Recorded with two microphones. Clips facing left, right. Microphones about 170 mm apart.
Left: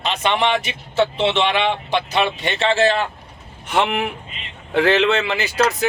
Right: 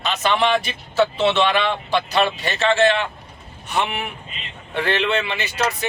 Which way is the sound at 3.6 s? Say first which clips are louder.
Left 4 dB; 90° left.